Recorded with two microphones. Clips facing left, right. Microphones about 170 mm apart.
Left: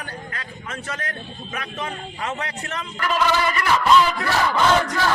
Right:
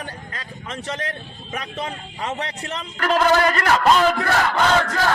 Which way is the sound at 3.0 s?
50° right (ahead or behind).